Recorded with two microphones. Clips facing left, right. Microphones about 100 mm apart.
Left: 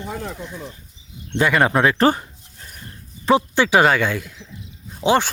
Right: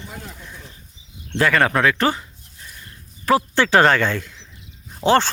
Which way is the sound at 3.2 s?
20° left (ahead or behind).